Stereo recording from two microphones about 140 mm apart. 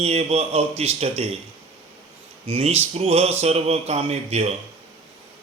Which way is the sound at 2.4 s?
45° right (ahead or behind).